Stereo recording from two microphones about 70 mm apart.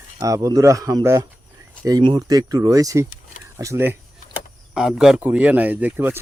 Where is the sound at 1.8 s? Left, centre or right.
Right.